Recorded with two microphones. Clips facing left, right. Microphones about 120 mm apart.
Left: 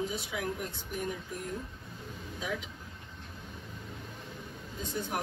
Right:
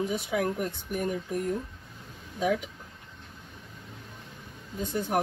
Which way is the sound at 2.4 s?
50° right (ahead or behind).